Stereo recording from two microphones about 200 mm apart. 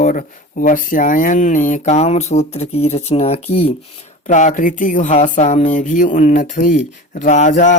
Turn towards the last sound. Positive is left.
turn(degrees=40)  # may be behind; listen again after turning